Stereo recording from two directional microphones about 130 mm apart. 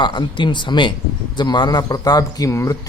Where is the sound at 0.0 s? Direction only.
35° left (ahead or behind).